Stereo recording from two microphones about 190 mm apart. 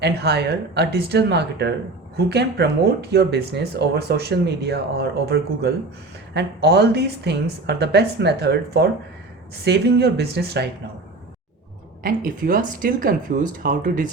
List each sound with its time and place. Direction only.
0.0 s speech: 60° right (ahead or behind)
12.0 s speech: 50° right (ahead or behind)